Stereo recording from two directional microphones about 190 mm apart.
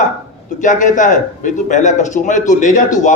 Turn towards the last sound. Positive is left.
turn(degrees=40)  # may be behind; listen again after turning